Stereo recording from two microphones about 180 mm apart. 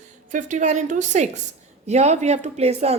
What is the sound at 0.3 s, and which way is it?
A woman's voice, 45° right (ahead or behind).